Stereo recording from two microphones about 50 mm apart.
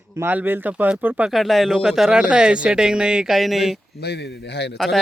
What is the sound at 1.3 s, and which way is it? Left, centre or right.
Speech, centre.